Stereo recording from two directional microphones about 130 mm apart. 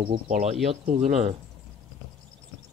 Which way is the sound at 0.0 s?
55° right (ahead or behind).